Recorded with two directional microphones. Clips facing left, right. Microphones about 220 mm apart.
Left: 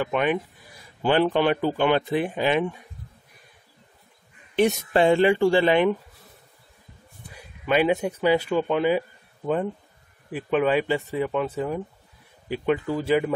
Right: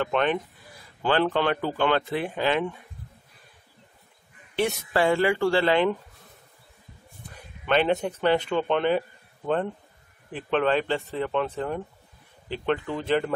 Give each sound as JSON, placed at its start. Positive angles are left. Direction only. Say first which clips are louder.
{"t": 0.0, "sound": "speech", "louder": "left 1 dB", "side_deg": 10}
{"t": 4.6, "sound": "speech", "louder": "left 4 dB", "side_deg": 20}
{"t": 7.6, "sound": "speech", "louder": "left 2 dB", "side_deg": 10}
{"t": 10.3, "sound": "speech", "louder": "left 2 dB", "side_deg": 10}